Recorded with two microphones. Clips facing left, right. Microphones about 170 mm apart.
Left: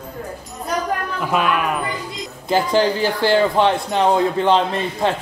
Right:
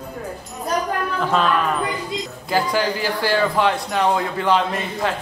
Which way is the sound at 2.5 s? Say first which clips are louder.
Left 4 dB; 25° left (ahead or behind).